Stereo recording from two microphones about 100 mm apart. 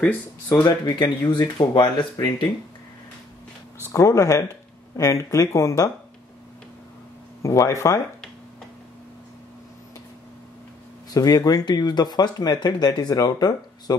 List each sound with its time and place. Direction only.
0.0 s speech: 15° left (ahead or behind)
0.7 s speech: 45° left (ahead or behind)
3.8 s speech: 30° left (ahead or behind)
7.4 s speech: 30° left (ahead or behind)
11.1 s speech: 40° left (ahead or behind)